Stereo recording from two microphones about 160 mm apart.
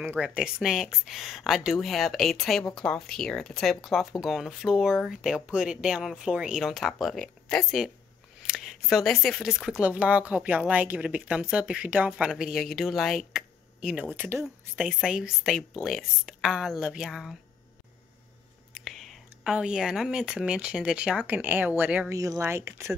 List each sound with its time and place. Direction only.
0.2 s speech: 5° right (ahead or behind)
18.7 s speech: centre (ahead or behind)
22.1 s speech: 20° right (ahead or behind)